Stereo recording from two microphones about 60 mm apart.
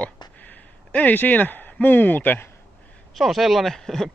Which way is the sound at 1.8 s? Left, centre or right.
Left.